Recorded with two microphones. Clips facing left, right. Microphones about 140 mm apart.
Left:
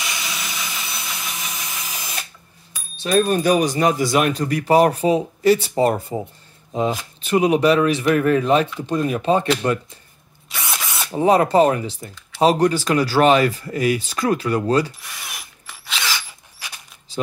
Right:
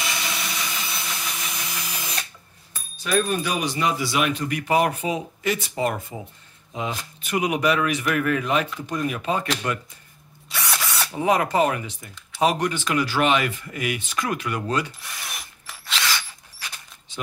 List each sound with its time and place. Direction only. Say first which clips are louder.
0.0 s wood: right 1 dB; centre (ahead or behind)
3.0 s speech: left 5 dB; 40° left (ahead or behind)
10.5 s drill: even; 20° left (ahead or behind)
11.1 s speech: left 6 dB; 35° left (ahead or behind)
15.2 s drill: even; centre (ahead or behind)
17.1 s crumpling: left 9 dB; 35° left (ahead or behind)